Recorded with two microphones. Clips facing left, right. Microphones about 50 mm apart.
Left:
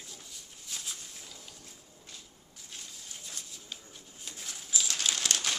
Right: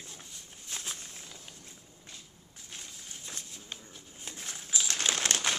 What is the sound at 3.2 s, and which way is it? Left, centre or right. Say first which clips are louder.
Bird: right 2 dB; right.